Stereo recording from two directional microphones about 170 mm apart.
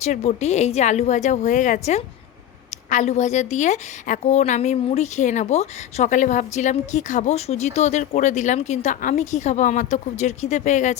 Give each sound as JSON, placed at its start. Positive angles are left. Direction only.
{"t": 0.0, "sound": "a woman's voice", "side_deg": 40}